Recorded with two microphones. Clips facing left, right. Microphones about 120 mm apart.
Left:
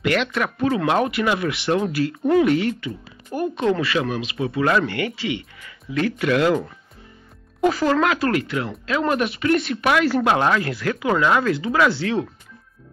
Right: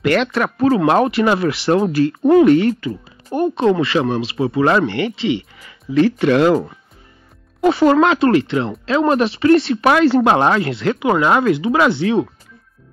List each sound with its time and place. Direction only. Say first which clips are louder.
0.0 s speech: right 5 dB; 40° right (ahead or behind)
7.6 s speech: right 6 dB; 20° right (ahead or behind)